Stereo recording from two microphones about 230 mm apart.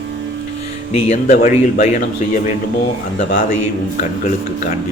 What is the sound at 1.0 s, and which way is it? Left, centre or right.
Speech, left.